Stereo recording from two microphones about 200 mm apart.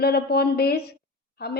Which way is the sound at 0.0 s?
55° left (ahead or behind).